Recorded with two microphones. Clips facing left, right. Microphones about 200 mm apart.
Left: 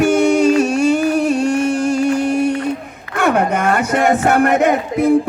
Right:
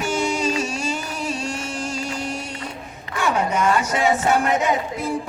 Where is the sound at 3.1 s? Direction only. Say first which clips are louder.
Left 6 dB; 60° left (ahead or behind).